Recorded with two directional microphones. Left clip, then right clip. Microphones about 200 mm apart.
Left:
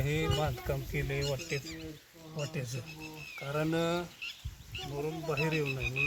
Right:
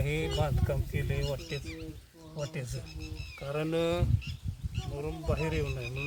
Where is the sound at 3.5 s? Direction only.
50° right (ahead or behind).